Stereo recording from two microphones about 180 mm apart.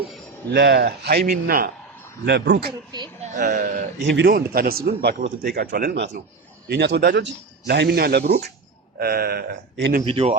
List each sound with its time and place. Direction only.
0.5 s a man's voice: 65° right (ahead or behind)
2.2 s a man's voice: 70° right (ahead or behind)
4.3 s a man's voice: 55° right (ahead or behind); by 9.9 s 75° right (ahead or behind)
10.0 s speech: 35° right (ahead or behind)